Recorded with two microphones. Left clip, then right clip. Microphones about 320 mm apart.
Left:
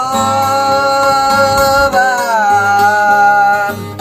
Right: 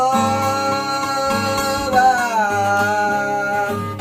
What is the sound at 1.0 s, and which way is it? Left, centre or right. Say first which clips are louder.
Music: left 10 dB; centre.